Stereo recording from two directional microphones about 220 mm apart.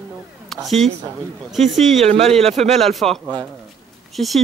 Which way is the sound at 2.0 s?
30° right (ahead or behind).